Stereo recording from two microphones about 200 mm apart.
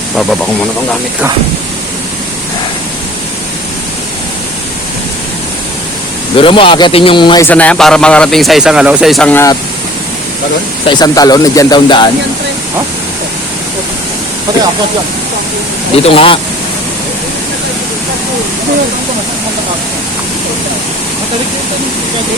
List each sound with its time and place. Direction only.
6.3 s speech: 25° left (ahead or behind)
7.4 s speech: 5° left (ahead or behind)
10.8 s speech: 20° left (ahead or behind)
16.0 s speech: 25° left (ahead or behind)